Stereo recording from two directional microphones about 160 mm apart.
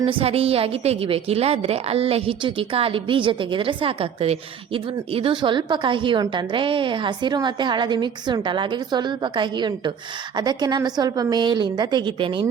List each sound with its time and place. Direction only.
0.0 s a woman's voice: 35° right (ahead or behind)